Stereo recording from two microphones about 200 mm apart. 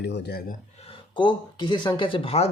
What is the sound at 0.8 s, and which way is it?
Speech, 25° left (ahead or behind).